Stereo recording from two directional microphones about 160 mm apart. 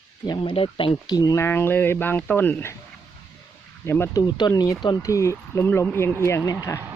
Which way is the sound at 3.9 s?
20° left (ahead or behind).